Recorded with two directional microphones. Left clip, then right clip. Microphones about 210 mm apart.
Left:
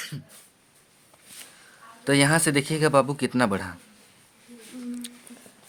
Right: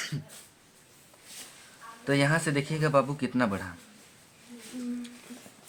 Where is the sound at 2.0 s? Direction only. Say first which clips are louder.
Left 5 dB; 55° left (ahead or behind).